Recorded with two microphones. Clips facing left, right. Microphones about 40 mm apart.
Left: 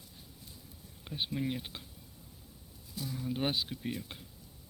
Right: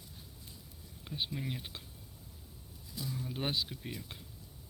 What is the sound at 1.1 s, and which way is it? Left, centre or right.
Speech, centre.